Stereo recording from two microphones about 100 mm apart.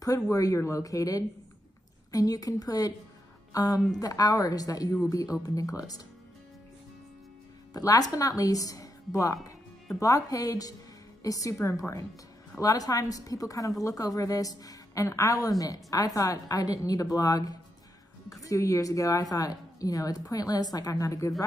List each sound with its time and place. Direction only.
0.0 s a woman's voice: 35° left (ahead or behind)
7.7 s a woman's voice: 40° left (ahead or behind)